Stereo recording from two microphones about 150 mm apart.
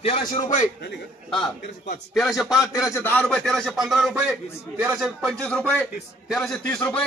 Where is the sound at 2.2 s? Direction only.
Centre (ahead or behind).